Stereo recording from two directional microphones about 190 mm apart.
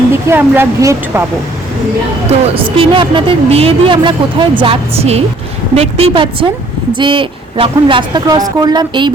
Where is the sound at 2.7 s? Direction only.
25° right (ahead or behind).